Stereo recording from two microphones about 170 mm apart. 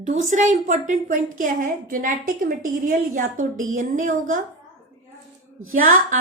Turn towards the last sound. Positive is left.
turn(degrees=-55)  # may be behind; listen again after turning